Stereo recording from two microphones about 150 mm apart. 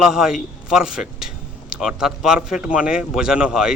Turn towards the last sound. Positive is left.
turn(degrees=-5)  # may be behind; listen again after turning